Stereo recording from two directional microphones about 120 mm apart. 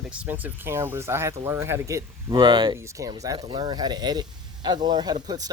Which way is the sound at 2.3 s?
40° right (ahead or behind).